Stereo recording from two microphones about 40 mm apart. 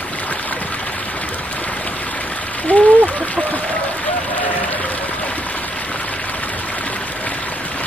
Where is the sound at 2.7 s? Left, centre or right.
Left.